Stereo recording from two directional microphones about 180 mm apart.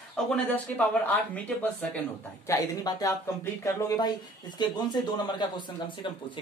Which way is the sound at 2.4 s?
20° left (ahead or behind).